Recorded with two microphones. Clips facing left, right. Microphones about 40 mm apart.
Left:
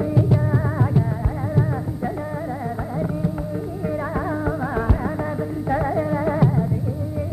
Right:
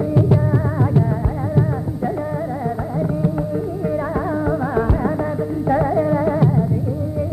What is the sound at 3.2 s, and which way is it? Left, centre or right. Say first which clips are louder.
Carnatic music: right 5 dB; centre.